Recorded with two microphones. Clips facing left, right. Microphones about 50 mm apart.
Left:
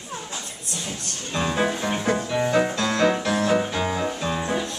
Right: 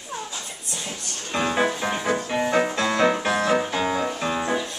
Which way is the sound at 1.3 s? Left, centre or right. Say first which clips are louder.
Right 1 dB; centre.